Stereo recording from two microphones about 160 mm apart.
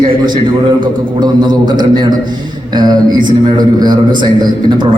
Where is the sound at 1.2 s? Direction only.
25° right (ahead or behind).